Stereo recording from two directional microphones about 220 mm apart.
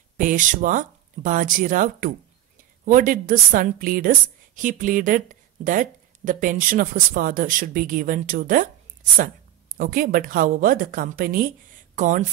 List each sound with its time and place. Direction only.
0.2 s speech: 35° right (ahead or behind)